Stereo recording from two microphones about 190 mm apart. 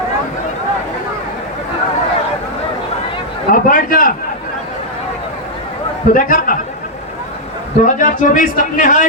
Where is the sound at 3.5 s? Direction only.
45° left (ahead or behind).